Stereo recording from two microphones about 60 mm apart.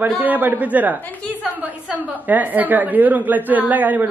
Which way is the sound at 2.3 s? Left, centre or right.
Right.